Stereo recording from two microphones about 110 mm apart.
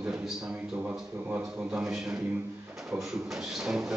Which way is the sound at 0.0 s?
5° right (ahead or behind).